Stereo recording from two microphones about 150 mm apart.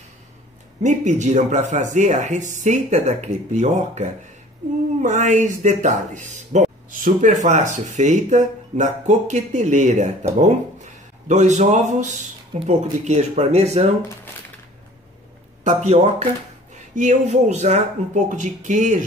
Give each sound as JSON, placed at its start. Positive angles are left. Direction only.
{"t": 0.8, "sound": "speech", "side_deg": -50}
{"t": 15.6, "sound": "speech", "side_deg": -50}